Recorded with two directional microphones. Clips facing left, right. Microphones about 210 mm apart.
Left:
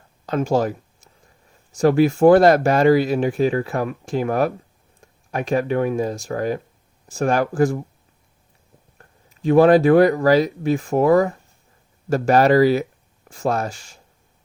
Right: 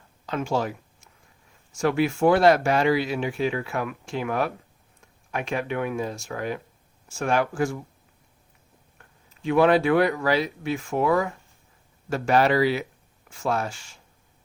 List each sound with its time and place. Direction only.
0.3 s speech: 40° left (ahead or behind)
9.0 s speech: 40° left (ahead or behind)